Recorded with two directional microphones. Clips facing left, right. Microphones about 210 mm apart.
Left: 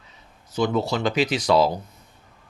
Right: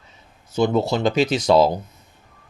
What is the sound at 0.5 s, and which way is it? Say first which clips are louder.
Speech: right 3 dB; 25° right (ahead or behind).